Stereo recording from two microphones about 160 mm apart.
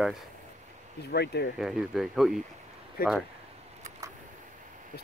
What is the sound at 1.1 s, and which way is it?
Speech, 90° left.